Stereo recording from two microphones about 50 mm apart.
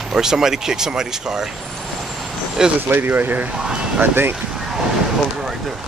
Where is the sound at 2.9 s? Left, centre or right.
Right.